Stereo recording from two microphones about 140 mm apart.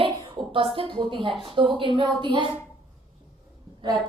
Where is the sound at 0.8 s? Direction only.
35° right (ahead or behind).